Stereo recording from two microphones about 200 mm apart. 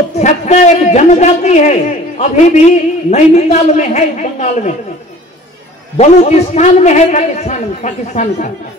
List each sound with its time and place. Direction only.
0.2 s a man's voice: 35° left (ahead or behind)
5.9 s a man's voice: 35° left (ahead or behind)